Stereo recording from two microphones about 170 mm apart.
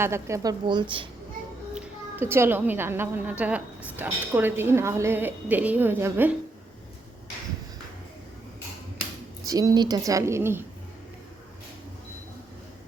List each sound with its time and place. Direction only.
0.0 s a woman's voice: 15° right (ahead or behind)
1.7 s a woman's voice: 15° right (ahead or behind)
9.5 s a woman's voice: 20° right (ahead or behind)